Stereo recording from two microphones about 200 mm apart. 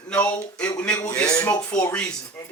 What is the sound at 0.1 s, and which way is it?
Speech, 5° left (ahead or behind).